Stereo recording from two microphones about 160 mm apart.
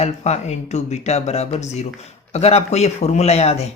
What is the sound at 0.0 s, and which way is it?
Speech, 45° left (ahead or behind).